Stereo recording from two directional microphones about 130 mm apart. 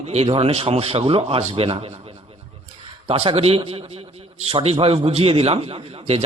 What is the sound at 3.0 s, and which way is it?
A man's voice, 50° right (ahead or behind).